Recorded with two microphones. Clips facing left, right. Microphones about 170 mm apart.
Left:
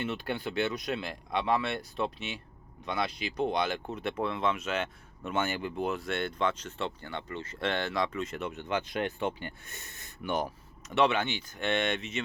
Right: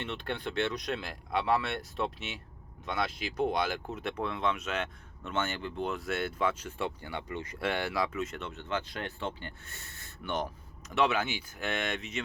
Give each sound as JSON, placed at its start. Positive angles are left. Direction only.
{"t": 0.0, "sound": "speech", "side_deg": 5}
{"t": 8.4, "sound": "speech", "side_deg": 15}